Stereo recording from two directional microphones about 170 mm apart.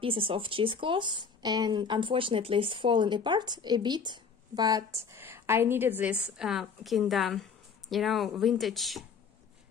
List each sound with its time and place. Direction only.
0.0 s speech: 30° right (ahead or behind); by 9.0 s centre (ahead or behind)